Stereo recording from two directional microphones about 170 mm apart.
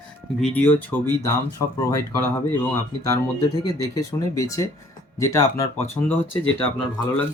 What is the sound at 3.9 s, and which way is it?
Speech, 20° left (ahead or behind).